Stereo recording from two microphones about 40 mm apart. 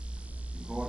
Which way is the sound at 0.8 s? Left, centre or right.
Right.